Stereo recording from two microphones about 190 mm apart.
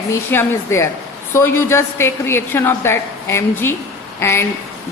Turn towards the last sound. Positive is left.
turn(degrees=15)  # may be behind; listen again after turning